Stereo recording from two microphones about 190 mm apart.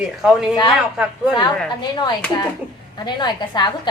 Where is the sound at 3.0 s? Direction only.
25° left (ahead or behind).